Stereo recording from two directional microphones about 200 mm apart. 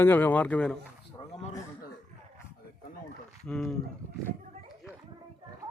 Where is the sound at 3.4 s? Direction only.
5° left (ahead or behind).